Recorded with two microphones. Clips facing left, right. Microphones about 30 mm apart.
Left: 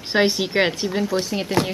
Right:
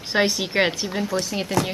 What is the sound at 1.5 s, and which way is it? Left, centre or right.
Speech, left.